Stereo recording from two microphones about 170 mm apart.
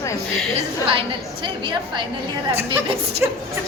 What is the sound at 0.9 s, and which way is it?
A woman's voice, 30° right (ahead or behind).